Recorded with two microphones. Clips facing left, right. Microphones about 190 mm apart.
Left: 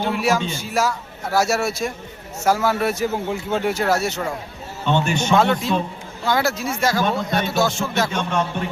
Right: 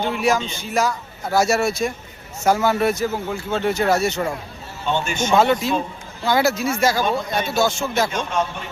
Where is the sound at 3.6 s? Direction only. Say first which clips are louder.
Right 3 dB; 5° left (ahead or behind).